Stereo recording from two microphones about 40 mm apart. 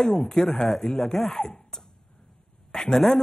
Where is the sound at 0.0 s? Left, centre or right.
Left.